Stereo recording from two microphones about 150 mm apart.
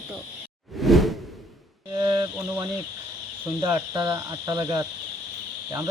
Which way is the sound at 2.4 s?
20° right (ahead or behind).